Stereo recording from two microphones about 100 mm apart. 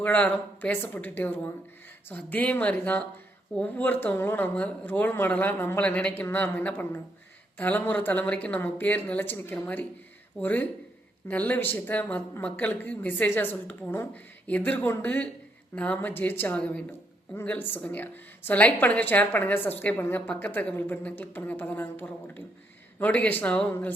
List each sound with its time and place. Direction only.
0.0 s a woman's voice: 15° left (ahead or behind)